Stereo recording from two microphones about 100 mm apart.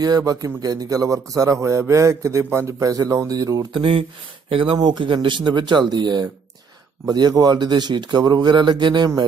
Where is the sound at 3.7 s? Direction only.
55° right (ahead or behind).